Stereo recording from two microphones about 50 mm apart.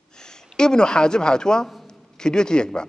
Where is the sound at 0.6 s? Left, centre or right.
Centre.